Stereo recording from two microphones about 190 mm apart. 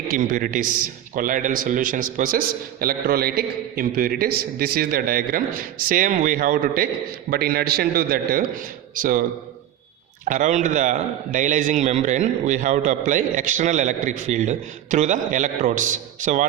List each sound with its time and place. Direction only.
0.1 s a man's voice: 45° right (ahead or behind)
10.2 s a man's voice: 40° right (ahead or behind)